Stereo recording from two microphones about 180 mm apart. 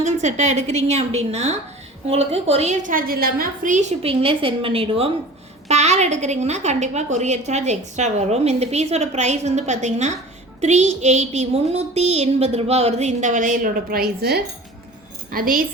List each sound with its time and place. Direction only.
0.0 s a woman's voice: 40° right (ahead or behind)